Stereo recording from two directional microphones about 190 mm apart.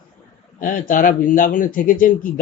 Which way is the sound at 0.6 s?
45° left (ahead or behind).